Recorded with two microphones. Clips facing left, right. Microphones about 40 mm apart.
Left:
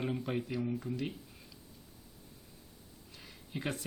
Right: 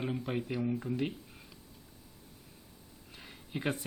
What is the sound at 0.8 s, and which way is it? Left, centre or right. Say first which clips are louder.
Speech: right 3 dB; right.